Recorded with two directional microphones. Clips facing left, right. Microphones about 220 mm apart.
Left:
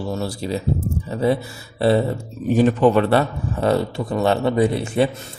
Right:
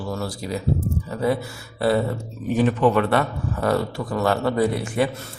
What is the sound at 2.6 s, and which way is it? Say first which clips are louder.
A man's voice: left 3 dB; 30° left (ahead or behind).